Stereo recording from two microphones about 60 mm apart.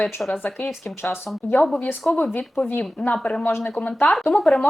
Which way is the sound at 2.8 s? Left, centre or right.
Left.